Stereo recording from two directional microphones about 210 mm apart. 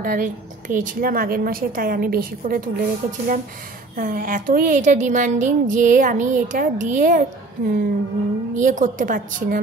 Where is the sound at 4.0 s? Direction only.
40° right (ahead or behind).